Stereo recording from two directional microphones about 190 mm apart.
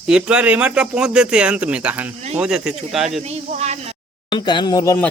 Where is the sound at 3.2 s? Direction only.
35° right (ahead or behind).